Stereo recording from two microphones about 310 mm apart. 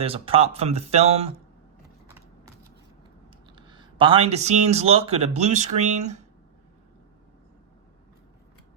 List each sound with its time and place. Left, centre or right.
0.0 s speech: centre
3.5 s speech: centre